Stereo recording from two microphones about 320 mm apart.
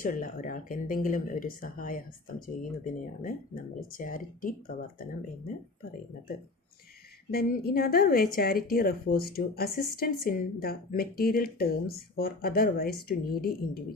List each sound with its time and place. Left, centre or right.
0.0 s a woman's voice: left
7.3 s a woman's voice: left